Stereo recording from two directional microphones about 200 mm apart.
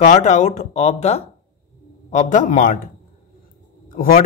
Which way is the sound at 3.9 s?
45° left (ahead or behind).